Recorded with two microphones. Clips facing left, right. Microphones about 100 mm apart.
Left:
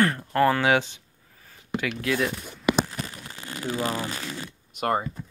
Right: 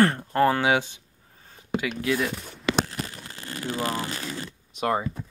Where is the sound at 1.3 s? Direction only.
25° right (ahead or behind).